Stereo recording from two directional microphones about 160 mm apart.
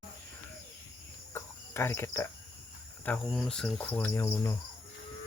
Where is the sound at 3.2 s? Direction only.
Centre (ahead or behind).